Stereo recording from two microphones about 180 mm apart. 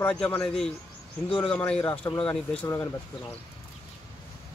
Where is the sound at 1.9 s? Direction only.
25° left (ahead or behind).